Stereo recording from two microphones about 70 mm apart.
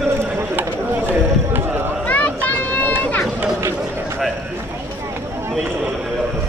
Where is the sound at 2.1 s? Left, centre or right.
Left.